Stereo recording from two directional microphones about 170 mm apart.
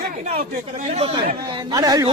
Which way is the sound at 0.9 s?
35° right (ahead or behind).